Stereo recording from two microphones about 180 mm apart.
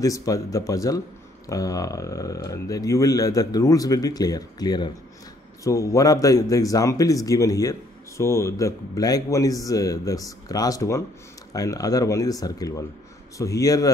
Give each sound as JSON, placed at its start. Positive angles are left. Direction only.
{"t": 0.0, "sound": "a man's voice", "side_deg": 20}